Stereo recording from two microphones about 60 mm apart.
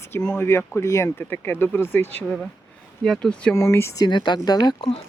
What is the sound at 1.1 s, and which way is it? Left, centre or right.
Speech, left.